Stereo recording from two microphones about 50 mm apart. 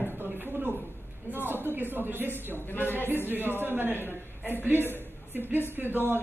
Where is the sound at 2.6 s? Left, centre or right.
Left.